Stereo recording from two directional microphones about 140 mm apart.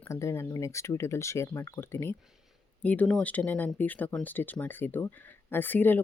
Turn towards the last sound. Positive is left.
turn(degrees=15)  # may be behind; listen again after turning